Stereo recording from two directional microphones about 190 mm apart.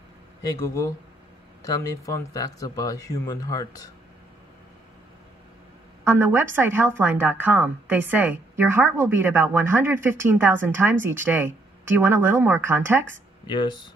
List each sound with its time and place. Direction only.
0.4 s speech: 15° left (ahead or behind)
6.0 s a woman's voice: 15° right (ahead or behind)
13.5 s speech: 25° left (ahead or behind)